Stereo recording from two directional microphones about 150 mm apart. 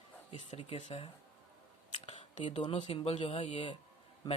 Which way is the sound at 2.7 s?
40° left (ahead or behind).